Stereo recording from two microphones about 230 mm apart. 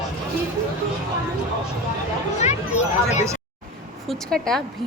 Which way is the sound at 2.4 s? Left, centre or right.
Left.